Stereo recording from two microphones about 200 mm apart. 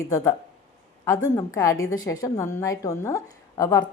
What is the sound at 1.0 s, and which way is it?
A woman's voice, 15° left (ahead or behind).